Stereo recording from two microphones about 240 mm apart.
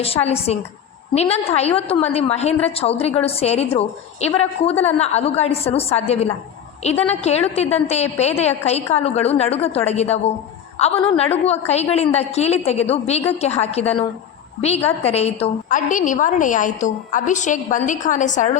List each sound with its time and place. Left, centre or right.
0.0 s a woman's voice: left